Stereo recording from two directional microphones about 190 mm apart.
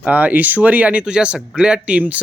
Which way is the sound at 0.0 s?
10° right (ahead or behind).